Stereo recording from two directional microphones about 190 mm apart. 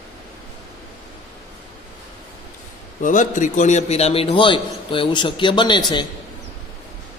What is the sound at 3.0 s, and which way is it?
A man's voice, 40° left (ahead or behind).